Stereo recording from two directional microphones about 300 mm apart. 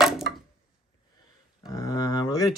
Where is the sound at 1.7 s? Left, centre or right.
Centre.